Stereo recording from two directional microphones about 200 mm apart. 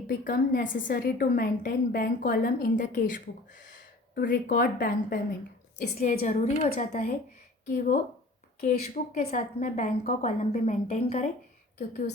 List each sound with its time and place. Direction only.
0.1 s a woman's voice: 45° left (ahead or behind)
8.6 s a woman's voice: 40° left (ahead or behind)